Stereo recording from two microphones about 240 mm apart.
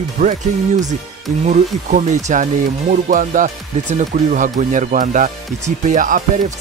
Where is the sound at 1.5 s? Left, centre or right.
Right.